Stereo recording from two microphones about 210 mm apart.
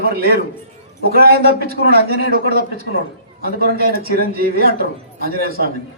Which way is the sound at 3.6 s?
45° right (ahead or behind).